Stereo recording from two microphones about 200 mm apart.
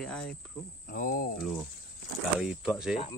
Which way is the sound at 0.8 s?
45° left (ahead or behind).